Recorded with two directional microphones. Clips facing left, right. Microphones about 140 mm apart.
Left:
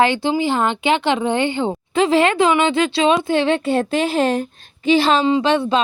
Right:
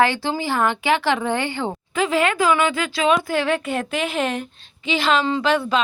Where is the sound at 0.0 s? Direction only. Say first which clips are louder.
Left 3 dB; 20° left (ahead or behind).